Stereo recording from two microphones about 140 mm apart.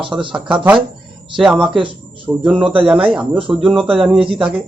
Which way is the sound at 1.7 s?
35° right (ahead or behind).